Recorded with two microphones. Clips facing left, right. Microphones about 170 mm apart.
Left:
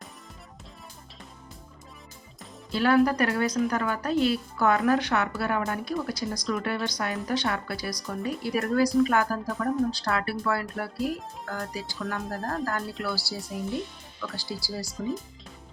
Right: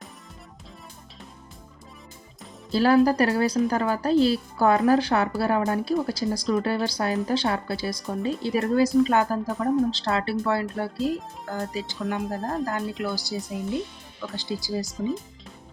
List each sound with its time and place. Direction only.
2.7 s speech: 30° right (ahead or behind)